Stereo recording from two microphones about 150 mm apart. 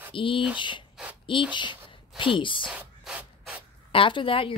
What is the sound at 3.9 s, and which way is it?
Speech, 35° left (ahead or behind).